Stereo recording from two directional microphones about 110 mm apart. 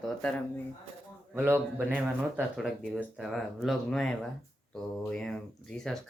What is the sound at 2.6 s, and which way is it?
Speech, centre (ahead or behind).